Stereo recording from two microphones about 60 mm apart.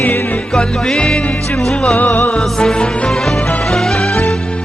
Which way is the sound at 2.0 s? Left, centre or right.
Left.